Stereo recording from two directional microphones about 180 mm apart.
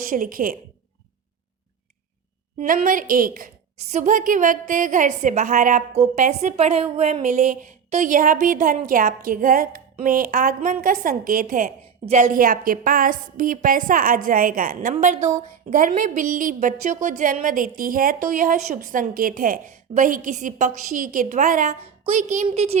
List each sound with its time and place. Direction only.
0.0 s a woman's voice: 50° right (ahead or behind)
2.6 s a woman's voice: 50° right (ahead or behind); by 22.8 s 35° right (ahead or behind)